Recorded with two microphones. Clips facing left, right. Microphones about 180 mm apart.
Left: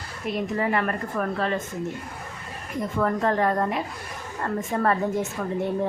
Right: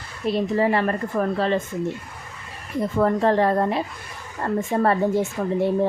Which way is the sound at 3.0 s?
30° right (ahead or behind).